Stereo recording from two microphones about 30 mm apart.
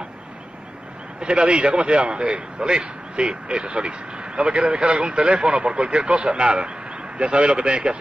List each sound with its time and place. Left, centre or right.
1.4 s speech: right